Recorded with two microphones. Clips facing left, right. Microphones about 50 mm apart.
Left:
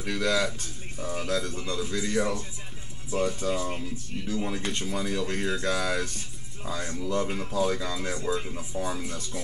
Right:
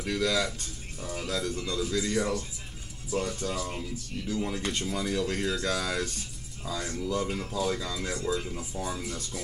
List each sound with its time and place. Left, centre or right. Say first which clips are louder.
0.0 s speech: left 1 dB; centre
3.1 s speech: left 4 dB; left